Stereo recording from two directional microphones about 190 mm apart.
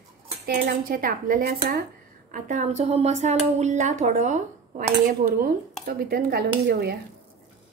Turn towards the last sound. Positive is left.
turn(degrees=-55)  # may be behind; listen again after turning